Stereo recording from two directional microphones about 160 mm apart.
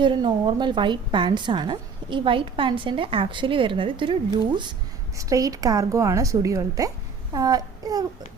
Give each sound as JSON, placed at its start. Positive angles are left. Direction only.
{"t": 0.0, "sound": "a woman's voice", "side_deg": -30}
{"t": 5.1, "sound": "a woman's voice", "side_deg": -20}